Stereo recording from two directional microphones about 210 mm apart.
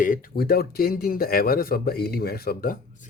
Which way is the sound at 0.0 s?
40° left (ahead or behind).